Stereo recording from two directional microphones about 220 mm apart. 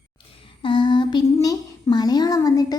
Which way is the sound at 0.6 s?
20° left (ahead or behind).